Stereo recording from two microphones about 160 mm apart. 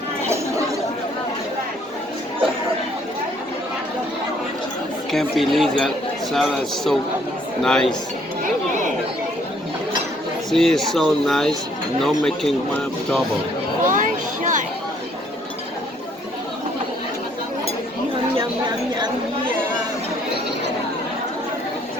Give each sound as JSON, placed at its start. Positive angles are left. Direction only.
{"t": 5.1, "sound": "speech", "side_deg": 0}
{"t": 10.5, "sound": "speech", "side_deg": 0}
{"t": 13.8, "sound": "a sound", "side_deg": -55}